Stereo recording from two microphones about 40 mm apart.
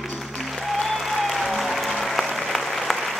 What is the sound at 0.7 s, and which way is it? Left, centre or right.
Applause, centre.